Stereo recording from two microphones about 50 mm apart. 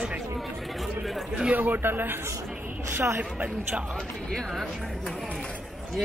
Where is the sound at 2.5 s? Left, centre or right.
Right.